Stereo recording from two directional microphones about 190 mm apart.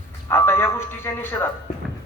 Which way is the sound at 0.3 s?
10° left (ahead or behind).